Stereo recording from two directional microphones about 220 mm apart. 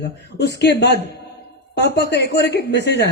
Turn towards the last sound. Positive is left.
turn(degrees=50)  # may be behind; listen again after turning